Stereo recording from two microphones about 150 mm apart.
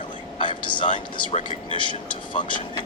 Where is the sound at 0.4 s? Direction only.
30° left (ahead or behind).